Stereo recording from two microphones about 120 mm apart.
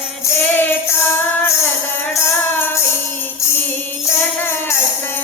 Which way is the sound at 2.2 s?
15° left (ahead or behind).